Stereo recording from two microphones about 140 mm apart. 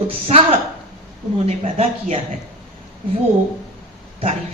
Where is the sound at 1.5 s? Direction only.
50° right (ahead or behind).